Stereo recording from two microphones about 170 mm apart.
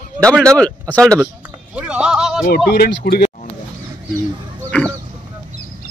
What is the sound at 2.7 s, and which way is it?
Speech, 65° left (ahead or behind).